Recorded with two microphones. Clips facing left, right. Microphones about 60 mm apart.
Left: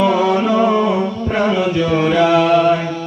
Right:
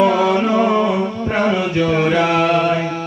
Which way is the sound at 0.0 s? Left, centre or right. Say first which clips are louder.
Even; right.